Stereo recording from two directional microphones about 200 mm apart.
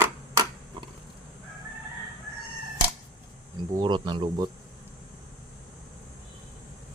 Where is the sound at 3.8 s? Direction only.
20° right (ahead or behind).